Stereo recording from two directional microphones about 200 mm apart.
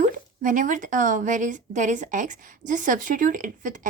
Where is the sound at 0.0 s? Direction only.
40° right (ahead or behind).